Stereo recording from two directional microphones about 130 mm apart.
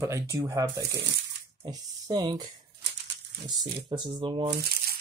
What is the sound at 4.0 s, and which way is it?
Speech, 35° right (ahead or behind).